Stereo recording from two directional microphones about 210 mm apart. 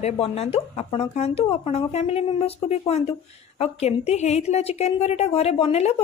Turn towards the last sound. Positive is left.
turn(degrees=30)  # may be behind; listen again after turning